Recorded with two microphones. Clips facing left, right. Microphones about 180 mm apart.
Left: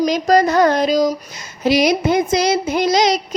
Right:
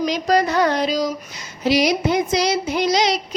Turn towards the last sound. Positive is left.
turn(degrees=45)  # may be behind; listen again after turning